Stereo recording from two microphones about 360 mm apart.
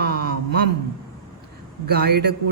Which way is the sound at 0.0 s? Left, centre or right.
Right.